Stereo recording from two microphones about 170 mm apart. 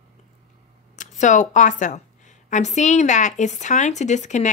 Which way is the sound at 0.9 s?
45° left (ahead or behind).